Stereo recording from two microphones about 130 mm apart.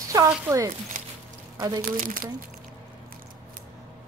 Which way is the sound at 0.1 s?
25° right (ahead or behind).